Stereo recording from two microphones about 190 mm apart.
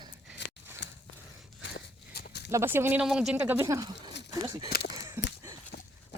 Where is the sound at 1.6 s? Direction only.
55° left (ahead or behind).